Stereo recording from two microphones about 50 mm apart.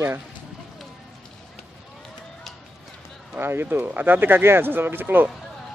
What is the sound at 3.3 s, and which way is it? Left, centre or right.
Speech, right.